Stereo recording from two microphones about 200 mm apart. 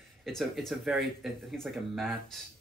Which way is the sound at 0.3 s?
Centre (ahead or behind).